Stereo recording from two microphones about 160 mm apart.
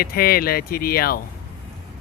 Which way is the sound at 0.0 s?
70° left (ahead or behind).